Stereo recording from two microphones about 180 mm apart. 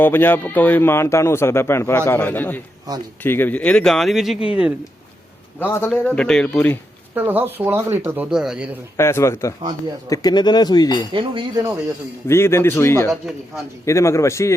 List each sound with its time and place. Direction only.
0.0 s speech: 10° left (ahead or behind)
5.5 s speech: 10° left (ahead or behind)
7.1 s speech: 10° right (ahead or behind)
9.0 s speech: 15° left (ahead or behind)
11.1 s speech: 25° right (ahead or behind)
12.3 s speech: 15° left (ahead or behind)
13.1 s speech: centre (ahead or behind)
13.8 s speech: 15° left (ahead or behind)